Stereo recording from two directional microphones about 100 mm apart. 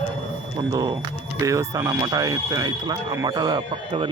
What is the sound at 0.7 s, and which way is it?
Speech, 40° right (ahead or behind).